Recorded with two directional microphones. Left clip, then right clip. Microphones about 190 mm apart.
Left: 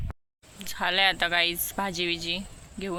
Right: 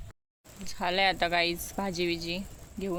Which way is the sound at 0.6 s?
5° right (ahead or behind).